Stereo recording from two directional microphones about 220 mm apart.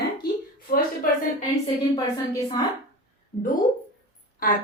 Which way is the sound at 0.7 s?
40° left (ahead or behind).